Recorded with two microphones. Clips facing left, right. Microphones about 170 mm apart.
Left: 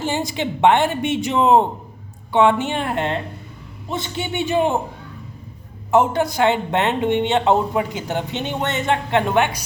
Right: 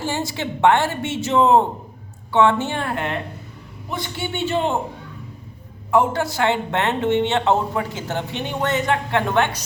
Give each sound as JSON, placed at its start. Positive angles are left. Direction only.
{"t": 0.0, "sound": "a woman's voice", "side_deg": 15}
{"t": 5.9, "sound": "speech", "side_deg": 20}